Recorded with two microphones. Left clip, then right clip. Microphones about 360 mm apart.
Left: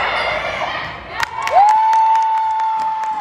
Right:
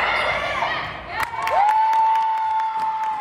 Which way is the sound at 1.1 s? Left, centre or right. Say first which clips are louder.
Left 6 dB; left.